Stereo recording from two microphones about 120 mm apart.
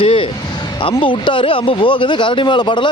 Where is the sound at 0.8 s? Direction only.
45° left (ahead or behind).